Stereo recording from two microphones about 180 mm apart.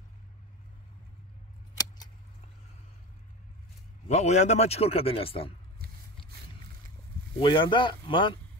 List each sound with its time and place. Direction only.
4.1 s speech: 40° left (ahead or behind)
7.3 s speech: 30° left (ahead or behind)